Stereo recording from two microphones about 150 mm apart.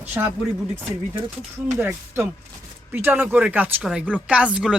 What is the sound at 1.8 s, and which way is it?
Speech, 15° right (ahead or behind).